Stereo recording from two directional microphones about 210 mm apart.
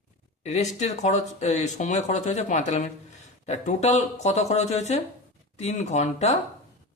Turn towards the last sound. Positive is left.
turn(degrees=30)  # may be behind; listen again after turning